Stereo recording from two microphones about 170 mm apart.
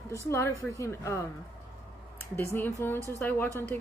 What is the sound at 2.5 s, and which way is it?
Speech, 10° left (ahead or behind).